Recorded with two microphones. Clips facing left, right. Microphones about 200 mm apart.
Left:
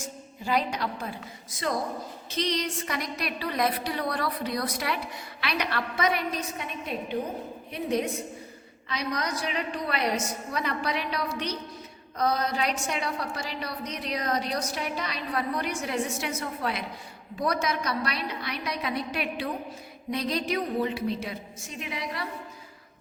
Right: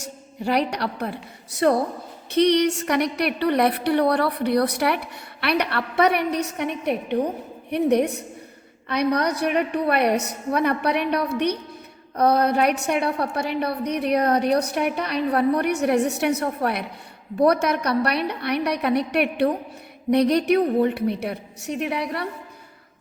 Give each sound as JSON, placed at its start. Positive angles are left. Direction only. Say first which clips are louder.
{"t": 0.0, "sound": "a woman's voice", "louder": "right 7 dB", "side_deg": -65}